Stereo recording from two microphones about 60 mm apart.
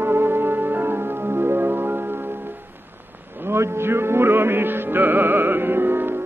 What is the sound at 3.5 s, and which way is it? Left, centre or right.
Music, right.